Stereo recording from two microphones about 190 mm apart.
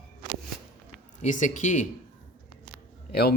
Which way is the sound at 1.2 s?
40° left (ahead or behind).